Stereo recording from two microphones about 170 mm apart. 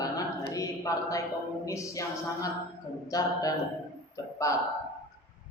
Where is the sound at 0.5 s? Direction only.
20° left (ahead or behind).